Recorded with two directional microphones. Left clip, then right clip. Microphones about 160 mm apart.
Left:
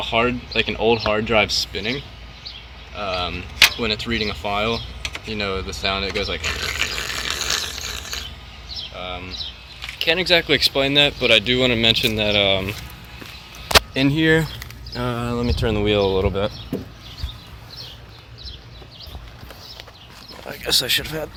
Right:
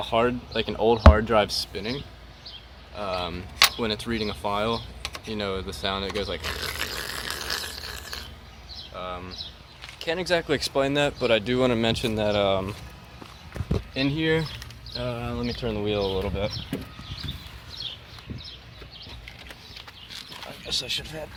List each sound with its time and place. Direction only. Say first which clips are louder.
0.1 s speech: left 3 dB; 15° right (ahead or behind)
2.9 s speech: left 5 dB; 25° right (ahead or behind)
5.0 s typing: left 6 dB; 55° right (ahead or behind)
5.3 s a sound: left 5 dB; 10° right (ahead or behind)
9.0 s a sound: even; 30° right (ahead or behind)
10.0 s speech: left 8 dB; centre (ahead or behind)
10.6 s speech: left 7 dB; 15° right (ahead or behind)
13.9 s speech: left 7 dB; 15° left (ahead or behind)
20.7 s speech: left 10 dB; 40° left (ahead or behind)